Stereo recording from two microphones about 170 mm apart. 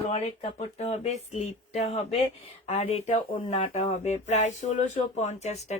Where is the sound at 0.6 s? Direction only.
40° left (ahead or behind).